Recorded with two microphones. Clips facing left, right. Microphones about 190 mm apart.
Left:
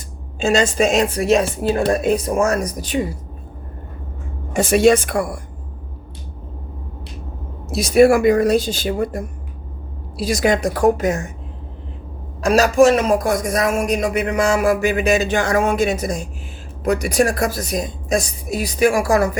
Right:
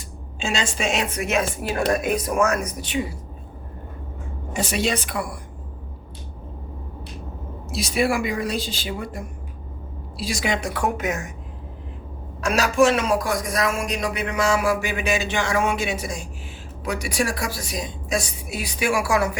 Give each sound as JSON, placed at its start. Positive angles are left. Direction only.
{"t": 0.3, "sound": "a woman's voice", "side_deg": 40}
{"t": 4.5, "sound": "music", "side_deg": 50}
{"t": 7.7, "sound": "music", "side_deg": 45}
{"t": 10.2, "sound": "a woman's voice", "side_deg": 45}
{"t": 12.5, "sound": "music", "side_deg": 40}
{"t": 16.8, "sound": "a woman's voice", "side_deg": 50}